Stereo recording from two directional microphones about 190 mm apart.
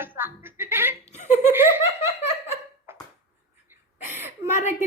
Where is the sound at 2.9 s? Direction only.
10° right (ahead or behind).